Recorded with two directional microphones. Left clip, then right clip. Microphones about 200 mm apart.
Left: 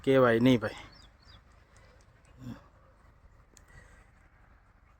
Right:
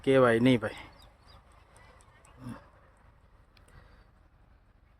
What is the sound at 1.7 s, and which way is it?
Clip-clop, 45° right (ahead or behind).